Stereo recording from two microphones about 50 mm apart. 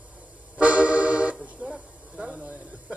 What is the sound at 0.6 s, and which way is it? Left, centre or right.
Vehicle, right.